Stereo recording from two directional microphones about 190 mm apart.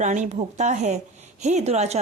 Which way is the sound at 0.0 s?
40° right (ahead or behind).